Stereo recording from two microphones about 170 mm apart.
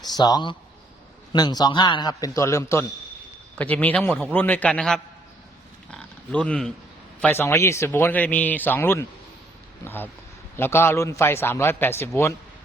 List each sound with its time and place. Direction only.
0.2 s a man's voice: 25° left (ahead or behind); by 4.9 s 5° left (ahead or behind)
5.9 s pig: 5° left (ahead or behind)
7.2 s speech: 10° left (ahead or behind)